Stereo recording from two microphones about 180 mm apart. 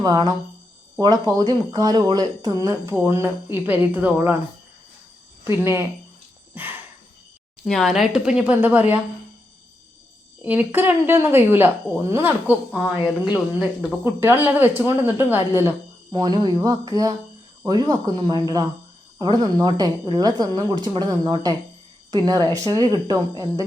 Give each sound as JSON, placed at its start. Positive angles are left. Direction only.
{"t": 0.0, "sound": "a woman's voice", "side_deg": -20}
{"t": 5.5, "sound": "speech", "side_deg": -15}
{"t": 6.5, "sound": "a sound", "side_deg": -10}
{"t": 7.6, "sound": "speech", "side_deg": 0}
{"t": 10.4, "sound": "speech", "side_deg": -10}
{"t": 13.0, "sound": "speech", "side_deg": 25}
{"t": 13.6, "sound": "a woman's voice", "side_deg": -10}